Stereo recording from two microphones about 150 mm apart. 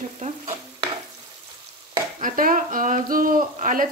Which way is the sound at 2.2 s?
65° right (ahead or behind).